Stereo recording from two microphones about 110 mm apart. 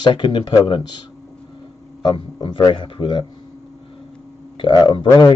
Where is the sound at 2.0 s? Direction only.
45° left (ahead or behind).